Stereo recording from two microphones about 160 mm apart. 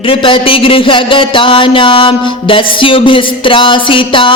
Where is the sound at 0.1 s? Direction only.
30° left (ahead or behind).